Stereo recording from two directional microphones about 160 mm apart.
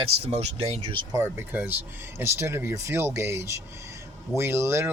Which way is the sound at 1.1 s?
15° right (ahead or behind).